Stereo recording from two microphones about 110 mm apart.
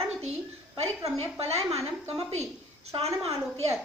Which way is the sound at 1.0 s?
70° right (ahead or behind).